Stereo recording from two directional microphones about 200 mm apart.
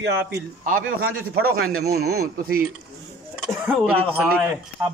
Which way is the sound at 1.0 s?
90° right.